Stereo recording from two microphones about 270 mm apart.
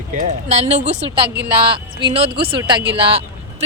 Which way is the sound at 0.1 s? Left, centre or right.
Right.